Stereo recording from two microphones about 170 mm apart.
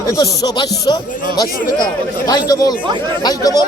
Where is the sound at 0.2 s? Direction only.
25° left (ahead or behind).